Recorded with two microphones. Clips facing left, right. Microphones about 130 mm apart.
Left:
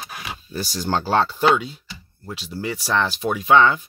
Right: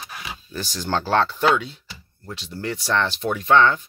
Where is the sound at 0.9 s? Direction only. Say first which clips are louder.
Even; 10° left (ahead or behind).